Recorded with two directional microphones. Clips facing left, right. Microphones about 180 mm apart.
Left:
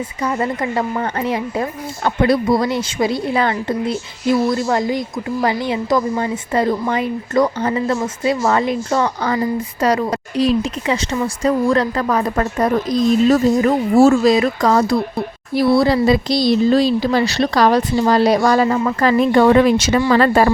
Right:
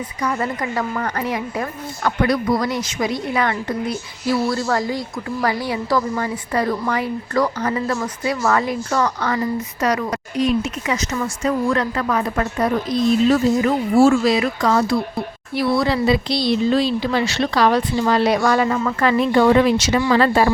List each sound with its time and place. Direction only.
0.2 s a woman's voice: 25° left (ahead or behind); by 20.5 s 50° left (ahead or behind)